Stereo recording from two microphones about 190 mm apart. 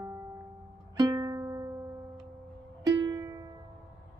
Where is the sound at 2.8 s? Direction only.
20° right (ahead or behind).